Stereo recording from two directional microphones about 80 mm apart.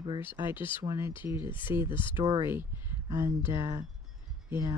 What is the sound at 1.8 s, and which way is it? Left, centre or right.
Speech, left.